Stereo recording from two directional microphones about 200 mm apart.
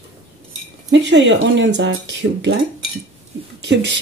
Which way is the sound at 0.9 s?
65° right (ahead or behind).